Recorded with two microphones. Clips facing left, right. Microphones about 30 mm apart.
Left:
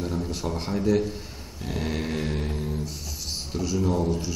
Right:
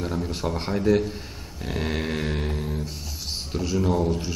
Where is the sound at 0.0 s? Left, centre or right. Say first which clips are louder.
Right 2 dB; centre.